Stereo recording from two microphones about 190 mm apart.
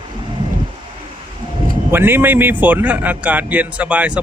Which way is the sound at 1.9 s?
10° right (ahead or behind).